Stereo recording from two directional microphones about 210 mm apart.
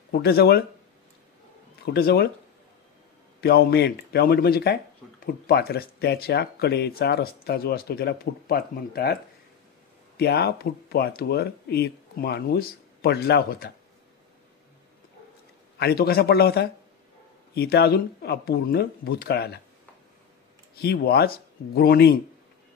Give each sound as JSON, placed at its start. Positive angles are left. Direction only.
{"t": 0.1, "sound": "speech", "side_deg": 50}
{"t": 2.0, "sound": "speech", "side_deg": 45}
{"t": 3.3, "sound": "speech", "side_deg": 50}
{"t": 15.8, "sound": "speech", "side_deg": 45}
{"t": 20.7, "sound": "speech", "side_deg": 50}